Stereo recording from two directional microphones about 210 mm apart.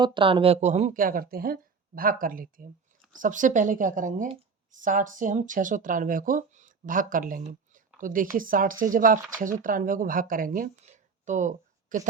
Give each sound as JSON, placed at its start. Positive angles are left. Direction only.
{"t": 0.0, "sound": "speech", "side_deg": -25}